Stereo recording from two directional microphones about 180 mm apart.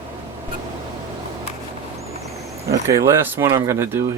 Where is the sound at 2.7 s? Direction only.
15° right (ahead or behind).